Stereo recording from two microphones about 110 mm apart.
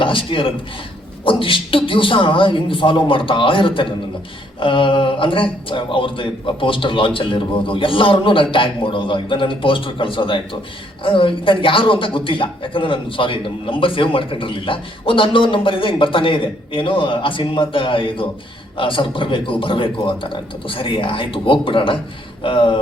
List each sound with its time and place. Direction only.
0.0 s a man's voice: 50° left (ahead or behind)